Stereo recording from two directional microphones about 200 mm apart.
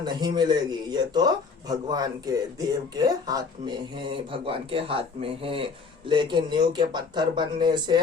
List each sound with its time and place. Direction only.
0.0 s speech: 20° right (ahead or behind)